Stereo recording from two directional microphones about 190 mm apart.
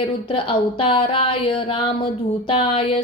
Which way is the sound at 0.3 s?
25° left (ahead or behind).